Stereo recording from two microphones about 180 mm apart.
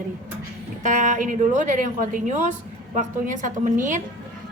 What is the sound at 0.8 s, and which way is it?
A woman's voice, 45° right (ahead or behind).